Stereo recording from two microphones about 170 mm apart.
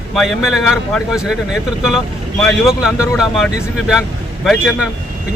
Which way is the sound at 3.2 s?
Centre (ahead or behind).